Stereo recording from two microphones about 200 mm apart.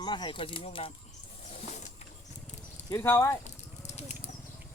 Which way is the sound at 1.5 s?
35° left (ahead or behind).